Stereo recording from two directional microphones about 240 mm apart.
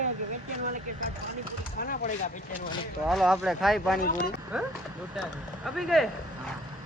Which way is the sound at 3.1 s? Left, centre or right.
Centre.